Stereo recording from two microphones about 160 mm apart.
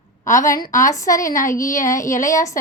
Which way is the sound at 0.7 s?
55° left (ahead or behind).